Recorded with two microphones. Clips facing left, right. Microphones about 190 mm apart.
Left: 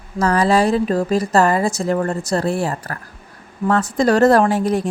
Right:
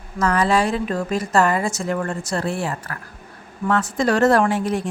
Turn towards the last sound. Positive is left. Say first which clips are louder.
# left 3 dB
turn(degrees=40)  # may be behind; listen again after turning